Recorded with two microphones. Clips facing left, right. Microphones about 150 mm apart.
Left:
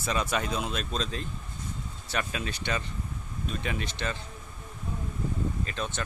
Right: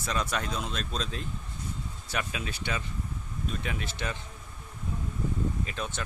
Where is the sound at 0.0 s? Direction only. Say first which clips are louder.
Left 2 dB; 5° left (ahead or behind).